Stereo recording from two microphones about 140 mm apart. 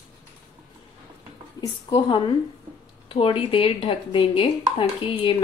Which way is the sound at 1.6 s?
30° left (ahead or behind).